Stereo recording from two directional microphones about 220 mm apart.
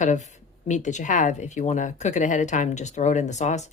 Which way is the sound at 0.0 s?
35° left (ahead or behind).